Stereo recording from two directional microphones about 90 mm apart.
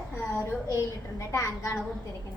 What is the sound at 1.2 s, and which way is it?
Speech, 35° left (ahead or behind).